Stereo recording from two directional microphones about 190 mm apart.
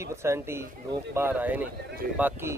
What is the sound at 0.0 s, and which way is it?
Speech, 15° right (ahead or behind).